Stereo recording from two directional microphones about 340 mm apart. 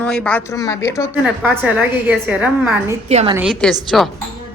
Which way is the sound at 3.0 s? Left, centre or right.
Centre.